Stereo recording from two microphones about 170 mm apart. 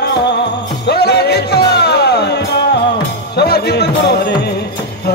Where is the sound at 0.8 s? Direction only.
75° left (ahead or behind).